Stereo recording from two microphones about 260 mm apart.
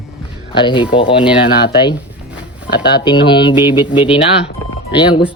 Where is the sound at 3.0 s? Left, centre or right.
Centre.